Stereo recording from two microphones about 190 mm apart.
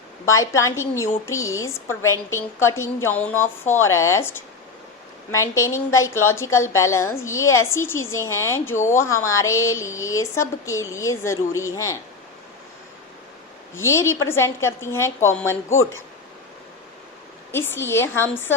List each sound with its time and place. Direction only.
0.3 s a woman's voice: 15° left (ahead or behind)
13.7 s a woman's voice: 15° left (ahead or behind)
17.5 s a woman's voice: 10° left (ahead or behind)